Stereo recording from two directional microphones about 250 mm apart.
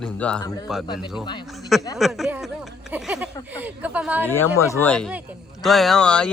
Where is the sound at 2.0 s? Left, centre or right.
Centre.